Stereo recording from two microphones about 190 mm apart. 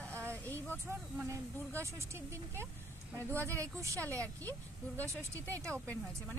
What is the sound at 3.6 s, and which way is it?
Speech, 15° right (ahead or behind).